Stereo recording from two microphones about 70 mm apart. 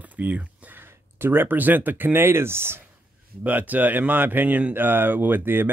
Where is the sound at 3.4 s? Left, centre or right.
Right.